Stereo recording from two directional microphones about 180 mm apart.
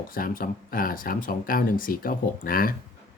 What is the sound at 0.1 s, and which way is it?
Speech, 50° left (ahead or behind).